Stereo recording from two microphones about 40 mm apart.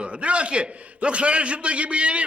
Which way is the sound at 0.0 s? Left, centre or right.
Right.